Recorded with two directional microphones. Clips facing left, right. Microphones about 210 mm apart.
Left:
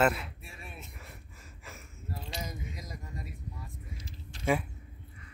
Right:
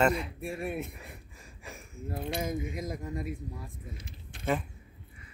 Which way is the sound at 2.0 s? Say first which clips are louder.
Right 8 dB; 55° right (ahead or behind).